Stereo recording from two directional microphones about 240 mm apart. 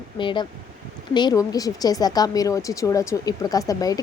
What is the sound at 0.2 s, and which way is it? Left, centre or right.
A woman's voice, centre.